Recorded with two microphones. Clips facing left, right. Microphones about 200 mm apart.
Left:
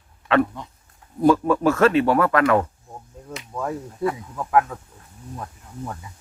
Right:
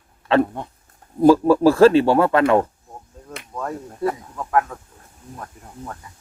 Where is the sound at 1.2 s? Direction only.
30° right (ahead or behind).